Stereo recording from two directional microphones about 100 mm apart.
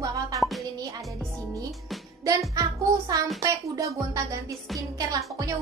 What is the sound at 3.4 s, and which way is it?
Speech, 35° right (ahead or behind).